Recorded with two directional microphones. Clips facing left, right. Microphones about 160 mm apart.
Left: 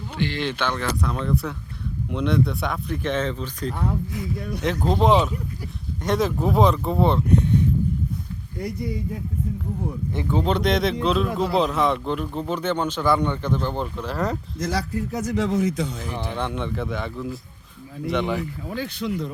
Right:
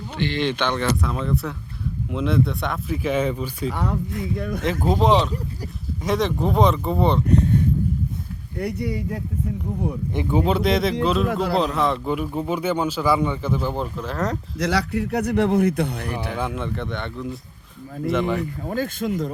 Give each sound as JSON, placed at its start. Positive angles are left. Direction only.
{"t": 0.2, "sound": "speech", "side_deg": 5}
{"t": 3.7, "sound": "speech", "side_deg": -90}
{"t": 4.6, "sound": "speech", "side_deg": -5}
{"t": 8.5, "sound": "speech", "side_deg": -70}
{"t": 10.2, "sound": "speech", "side_deg": -15}
{"t": 10.4, "sound": "speech", "side_deg": -5}
{"t": 14.6, "sound": "speech", "side_deg": -75}
{"t": 16.3, "sound": "speech", "side_deg": -5}
{"t": 18.6, "sound": "speech", "side_deg": -45}